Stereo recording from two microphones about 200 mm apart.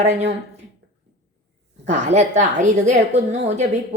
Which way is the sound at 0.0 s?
35° right (ahead or behind).